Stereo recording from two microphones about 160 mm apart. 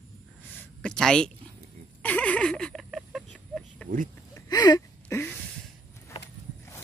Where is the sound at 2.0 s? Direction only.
10° left (ahead or behind).